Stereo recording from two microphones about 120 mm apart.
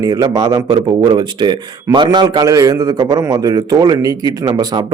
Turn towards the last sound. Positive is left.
turn(degrees=-30)  # may be behind; listen again after turning